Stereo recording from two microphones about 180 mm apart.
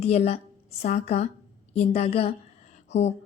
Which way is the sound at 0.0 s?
35° left (ahead or behind).